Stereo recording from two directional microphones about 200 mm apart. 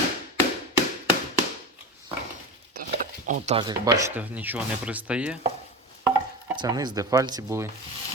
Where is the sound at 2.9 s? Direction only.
35° right (ahead or behind).